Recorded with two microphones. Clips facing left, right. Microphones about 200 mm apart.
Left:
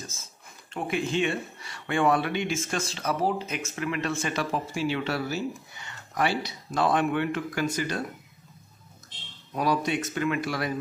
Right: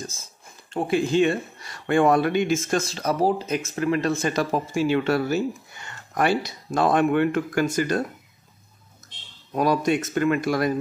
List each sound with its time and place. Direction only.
0.7 s speech: 30° right (ahead or behind)
9.5 s speech: 45° right (ahead or behind)